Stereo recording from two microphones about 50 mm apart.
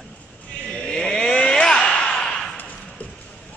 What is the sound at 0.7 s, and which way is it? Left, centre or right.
Vehicle, centre.